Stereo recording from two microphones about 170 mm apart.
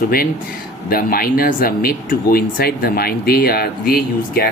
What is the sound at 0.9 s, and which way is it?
Speech, 60° left (ahead or behind).